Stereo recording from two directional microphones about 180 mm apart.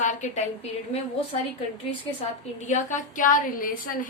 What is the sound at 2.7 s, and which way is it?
A woman's voice, 45° left (ahead or behind).